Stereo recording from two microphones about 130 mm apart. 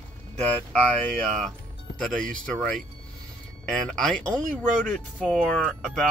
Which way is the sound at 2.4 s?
5° left (ahead or behind).